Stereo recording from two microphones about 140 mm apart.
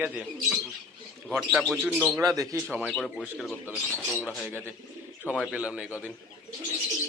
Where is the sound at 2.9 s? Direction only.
5° left (ahead or behind).